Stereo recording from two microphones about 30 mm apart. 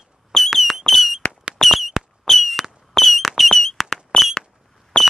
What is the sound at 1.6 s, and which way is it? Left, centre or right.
Fireworks, centre.